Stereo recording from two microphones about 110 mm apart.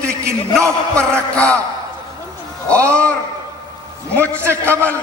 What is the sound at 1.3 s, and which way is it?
Speech, 10° left (ahead or behind).